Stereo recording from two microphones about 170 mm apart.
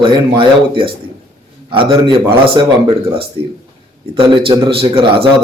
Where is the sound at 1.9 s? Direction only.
30° right (ahead or behind).